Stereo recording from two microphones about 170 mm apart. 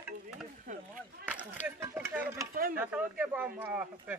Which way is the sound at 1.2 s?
10° right (ahead or behind).